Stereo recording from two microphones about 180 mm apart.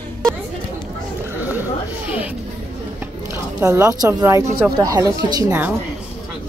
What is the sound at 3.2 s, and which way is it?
A woman's voice, 15° right (ahead or behind).